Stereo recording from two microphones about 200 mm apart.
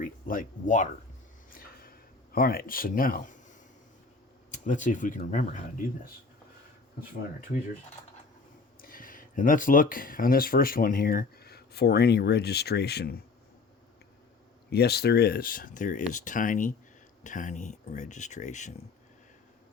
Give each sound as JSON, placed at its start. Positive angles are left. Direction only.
{"t": 0.0, "sound": "speech", "side_deg": 45}
{"t": 1.6, "sound": "a sound", "side_deg": 45}
{"t": 2.3, "sound": "speech", "side_deg": 50}
{"t": 4.5, "sound": "speech", "side_deg": 40}
{"t": 8.8, "sound": "speech", "side_deg": 45}
{"t": 14.7, "sound": "speech", "side_deg": 55}